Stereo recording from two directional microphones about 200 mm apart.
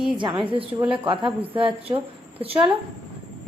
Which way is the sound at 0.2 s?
25° right (ahead or behind).